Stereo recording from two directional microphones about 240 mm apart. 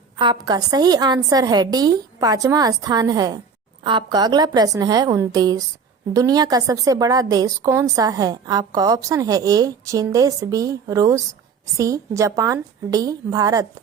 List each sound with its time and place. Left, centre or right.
0.2 s a woman's voice: centre